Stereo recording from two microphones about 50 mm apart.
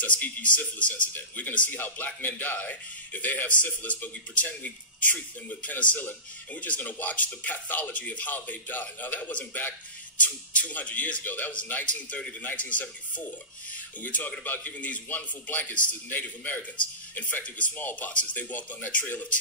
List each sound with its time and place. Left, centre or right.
0.0 s a man's voice: left
14.8 s speech: left